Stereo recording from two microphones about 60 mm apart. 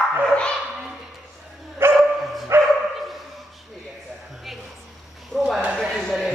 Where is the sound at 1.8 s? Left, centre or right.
Right.